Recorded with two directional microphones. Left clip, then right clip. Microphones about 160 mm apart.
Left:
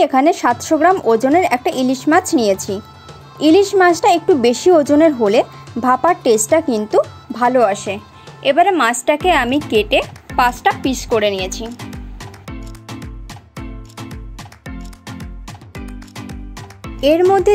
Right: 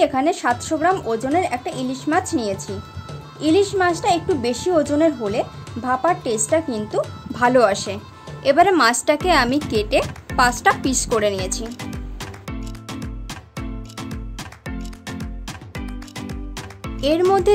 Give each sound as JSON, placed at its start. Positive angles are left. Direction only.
{"t": 0.0, "sound": "speech", "side_deg": 35}
{"t": 7.3, "sound": "speech", "side_deg": 15}
{"t": 12.4, "sound": "music", "side_deg": 0}
{"t": 17.2, "sound": "speech", "side_deg": 20}